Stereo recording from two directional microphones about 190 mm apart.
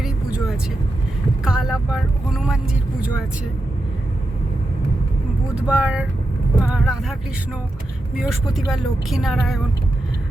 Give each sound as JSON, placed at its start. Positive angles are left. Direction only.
{"t": 0.0, "sound": "vehicle", "side_deg": -5}
{"t": 1.5, "sound": "speech", "side_deg": -5}
{"t": 5.6, "sound": "speech", "side_deg": -5}
{"t": 8.2, "sound": "speech", "side_deg": 0}